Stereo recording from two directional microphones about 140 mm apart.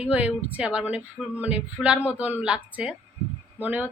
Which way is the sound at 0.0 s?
10° right (ahead or behind).